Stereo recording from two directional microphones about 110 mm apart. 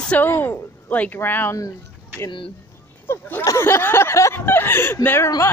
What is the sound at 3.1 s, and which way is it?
Speech, 20° left (ahead or behind).